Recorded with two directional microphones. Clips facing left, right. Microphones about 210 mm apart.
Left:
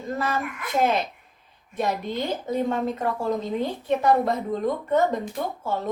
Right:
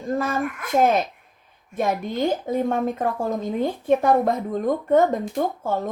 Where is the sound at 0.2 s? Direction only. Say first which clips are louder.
Right 3 dB; 45° right (ahead or behind).